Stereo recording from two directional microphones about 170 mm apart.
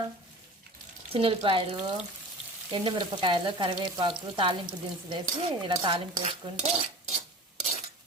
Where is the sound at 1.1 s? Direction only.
30° right (ahead or behind).